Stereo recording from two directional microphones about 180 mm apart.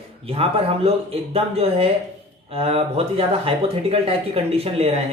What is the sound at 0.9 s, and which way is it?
Speech, 35° right (ahead or behind).